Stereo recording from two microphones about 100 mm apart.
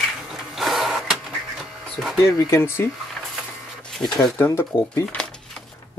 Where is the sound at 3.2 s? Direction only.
5° left (ahead or behind).